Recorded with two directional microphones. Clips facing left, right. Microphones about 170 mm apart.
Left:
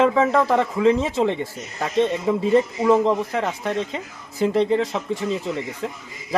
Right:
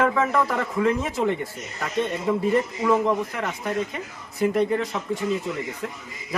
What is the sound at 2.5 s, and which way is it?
A man's voice, 30° left (ahead or behind).